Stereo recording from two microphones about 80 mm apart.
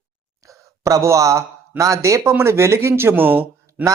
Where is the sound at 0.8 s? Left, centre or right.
Right.